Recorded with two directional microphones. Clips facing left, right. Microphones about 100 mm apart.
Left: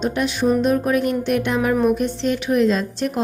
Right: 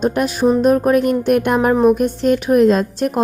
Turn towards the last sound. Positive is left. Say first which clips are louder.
# right 5 dB
turn(degrees=-50)  # may be behind; listen again after turning